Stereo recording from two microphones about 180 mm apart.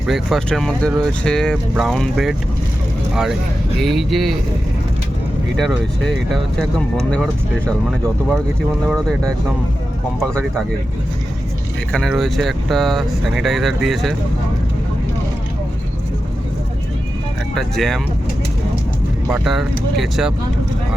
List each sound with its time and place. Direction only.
0.1 s speech: centre (ahead or behind)
3.8 s speech: centre (ahead or behind)
5.5 s speech: centre (ahead or behind)
8.9 s speech: 5° left (ahead or behind)
11.9 s speech: 5° left (ahead or behind)
17.5 s speech: centre (ahead or behind)
19.3 s speech: centre (ahead or behind)